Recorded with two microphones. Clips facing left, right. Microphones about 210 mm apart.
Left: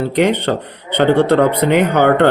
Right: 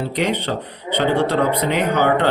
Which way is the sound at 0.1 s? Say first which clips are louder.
Left 6 dB; 55° left (ahead or behind).